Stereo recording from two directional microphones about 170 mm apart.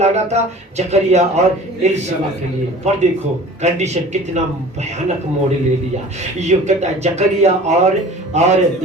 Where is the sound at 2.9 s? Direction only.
40° right (ahead or behind).